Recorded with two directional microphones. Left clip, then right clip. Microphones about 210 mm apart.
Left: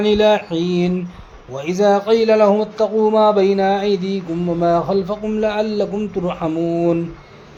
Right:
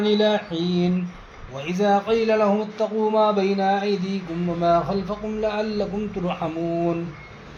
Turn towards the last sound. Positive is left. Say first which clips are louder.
# left 7 dB
turn(degrees=45)  # may be behind; listen again after turning